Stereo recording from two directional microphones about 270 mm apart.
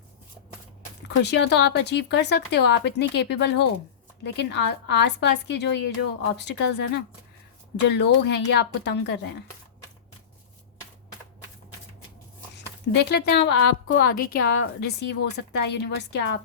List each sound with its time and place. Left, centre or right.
1.0 s a woman's voice: left
12.5 s a woman's voice: left